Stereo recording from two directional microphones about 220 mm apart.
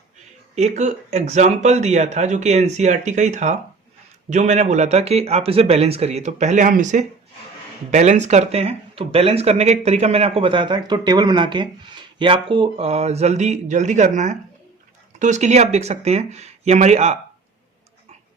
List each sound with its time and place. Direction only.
0.8 s speech: 30° right (ahead or behind)